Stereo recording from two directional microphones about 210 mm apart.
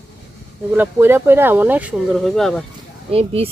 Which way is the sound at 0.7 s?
10° right (ahead or behind).